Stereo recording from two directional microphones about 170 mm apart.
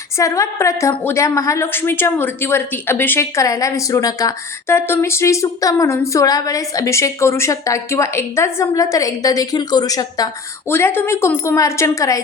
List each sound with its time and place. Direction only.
0.2 s a woman's voice: 20° left (ahead or behind)